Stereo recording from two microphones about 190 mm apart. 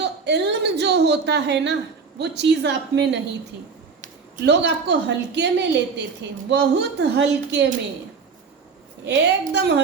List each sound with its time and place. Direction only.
0.0 s a woman's voice: 65° right (ahead or behind)
4.4 s a woman's voice: 65° right (ahead or behind)
9.0 s a woman's voice: 65° right (ahead or behind)